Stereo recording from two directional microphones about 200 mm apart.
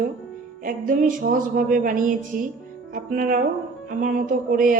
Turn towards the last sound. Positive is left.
turn(degrees=-45)  # may be behind; listen again after turning